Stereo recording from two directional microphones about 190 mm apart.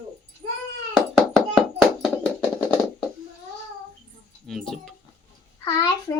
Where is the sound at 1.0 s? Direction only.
5° left (ahead or behind).